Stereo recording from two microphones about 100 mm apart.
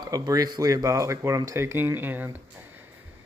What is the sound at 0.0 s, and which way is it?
Speech, 40° right (ahead or behind).